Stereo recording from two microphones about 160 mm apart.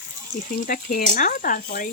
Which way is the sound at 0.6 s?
60° left (ahead or behind).